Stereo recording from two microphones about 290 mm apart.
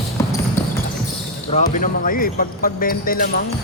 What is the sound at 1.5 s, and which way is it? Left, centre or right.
Speech, left.